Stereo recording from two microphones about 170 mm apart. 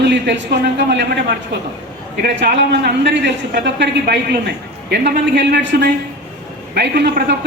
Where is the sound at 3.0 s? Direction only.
90° right.